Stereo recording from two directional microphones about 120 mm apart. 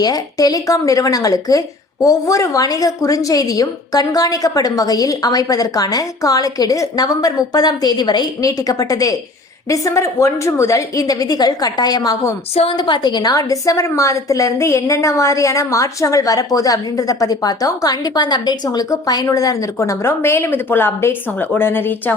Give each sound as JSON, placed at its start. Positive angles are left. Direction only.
{"t": 0.0, "sound": "a woman's voice", "side_deg": 30}